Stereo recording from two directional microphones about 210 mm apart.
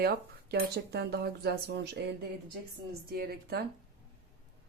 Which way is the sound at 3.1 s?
45° right (ahead or behind).